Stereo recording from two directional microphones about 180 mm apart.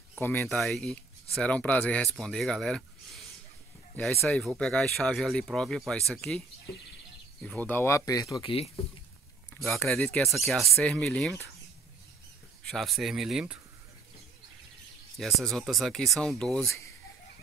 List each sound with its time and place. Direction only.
0.2 s speech: 10° left (ahead or behind)
7.4 s speech: 10° left (ahead or behind); by 8.8 s 30° left (ahead or behind)
9.5 s speech: 5° left (ahead or behind)
12.6 s speech: centre (ahead or behind)
15.1 s speech: centre (ahead or behind)